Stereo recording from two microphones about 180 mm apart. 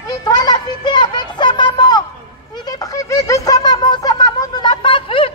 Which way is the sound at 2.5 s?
20° left (ahead or behind).